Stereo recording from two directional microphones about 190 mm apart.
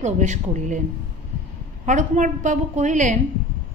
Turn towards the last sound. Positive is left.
turn(degrees=-40)  # may be behind; listen again after turning